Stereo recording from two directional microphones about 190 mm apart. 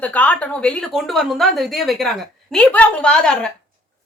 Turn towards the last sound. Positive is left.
turn(degrees=5)  # may be behind; listen again after turning